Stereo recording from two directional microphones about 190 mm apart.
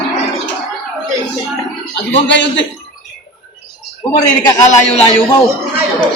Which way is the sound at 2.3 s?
75° left (ahead or behind).